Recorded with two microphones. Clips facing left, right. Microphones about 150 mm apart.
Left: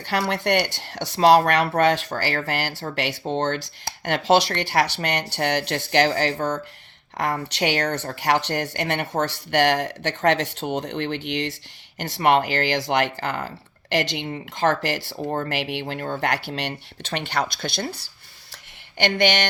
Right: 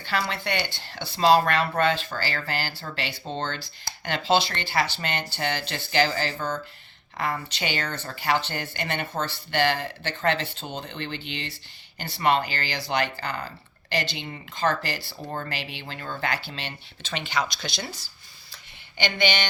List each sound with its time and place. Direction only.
0.0 s speech: 65° left (ahead or behind)
13.9 s speech: 90° left
15.2 s speech: 45° left (ahead or behind)
15.4 s speech: 75° left (ahead or behind)
16.2 s speech: 75° left (ahead or behind); by 18.0 s 55° left (ahead or behind)
18.9 s speech: 80° left